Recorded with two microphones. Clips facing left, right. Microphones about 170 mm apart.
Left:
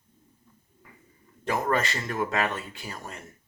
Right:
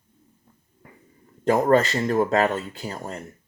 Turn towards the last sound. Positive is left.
turn(degrees=-35)  # may be behind; listen again after turning